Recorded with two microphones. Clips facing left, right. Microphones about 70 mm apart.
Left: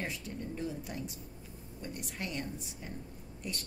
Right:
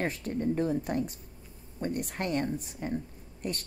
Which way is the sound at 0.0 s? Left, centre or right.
Right.